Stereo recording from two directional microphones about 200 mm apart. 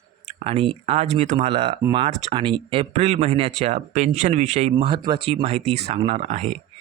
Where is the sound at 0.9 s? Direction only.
30° right (ahead or behind).